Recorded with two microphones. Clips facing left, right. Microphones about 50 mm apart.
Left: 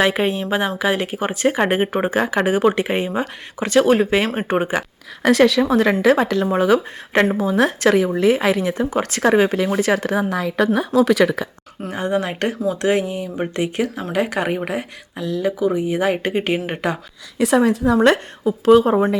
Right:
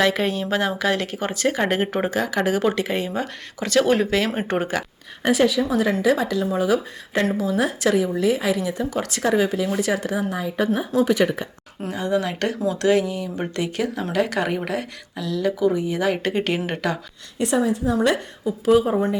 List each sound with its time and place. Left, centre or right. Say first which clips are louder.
0.0 s a woman's voice: left 2 dB; left
2.1 s a woman's voice: left 4 dB; left
3.8 s a woman's voice: left 4 dB; centre
5.2 s a woman's voice: left 5 dB; left
11.9 s a woman's voice: left 2 dB; left
17.5 s a woman's voice: left 5 dB; left